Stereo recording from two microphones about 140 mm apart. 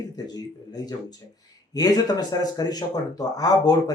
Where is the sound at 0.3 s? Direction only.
25° left (ahead or behind).